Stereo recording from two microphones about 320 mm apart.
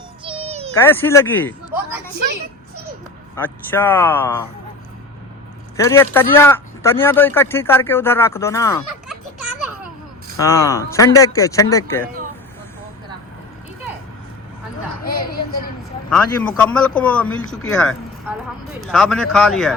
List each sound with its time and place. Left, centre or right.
0.3 s a sound: centre
0.8 s speech: centre
3.3 s speech: centre
5.7 s speech: centre
10.4 s speech: centre
15.0 s vehicle: left
16.0 s a man's voice: centre